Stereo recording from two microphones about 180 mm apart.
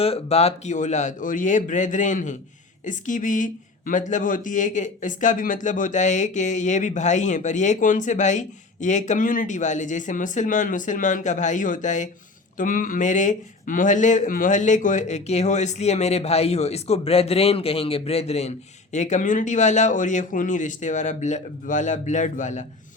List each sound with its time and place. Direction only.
0.0 s speech: 35° left (ahead or behind)